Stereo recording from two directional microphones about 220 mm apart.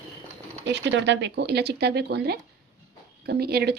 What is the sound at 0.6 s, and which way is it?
Speech, 50° right (ahead or behind).